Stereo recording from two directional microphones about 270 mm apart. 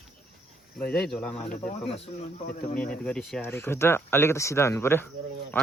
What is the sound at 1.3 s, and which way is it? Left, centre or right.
Speech, left.